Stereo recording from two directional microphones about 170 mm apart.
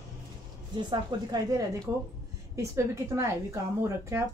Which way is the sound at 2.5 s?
15° right (ahead or behind).